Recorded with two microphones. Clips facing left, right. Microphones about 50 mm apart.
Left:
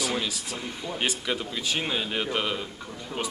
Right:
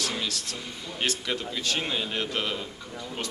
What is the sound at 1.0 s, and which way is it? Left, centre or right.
A man's voice, centre.